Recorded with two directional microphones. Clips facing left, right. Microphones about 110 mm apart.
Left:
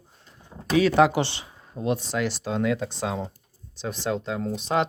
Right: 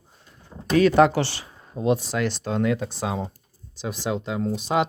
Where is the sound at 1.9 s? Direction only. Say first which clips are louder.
Right 1 dB; centre (ahead or behind).